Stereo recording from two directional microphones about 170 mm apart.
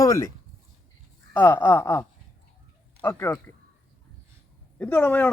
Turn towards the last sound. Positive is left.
turn(degrees=10)  # may be behind; listen again after turning